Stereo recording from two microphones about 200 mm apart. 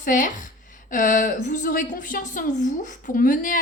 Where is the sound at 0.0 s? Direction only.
40° left (ahead or behind).